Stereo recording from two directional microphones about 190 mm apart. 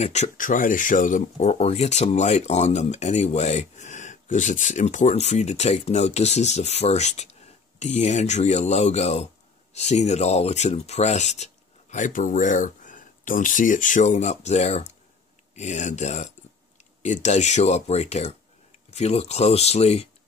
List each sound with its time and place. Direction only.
0.0 s speech: 35° left (ahead or behind)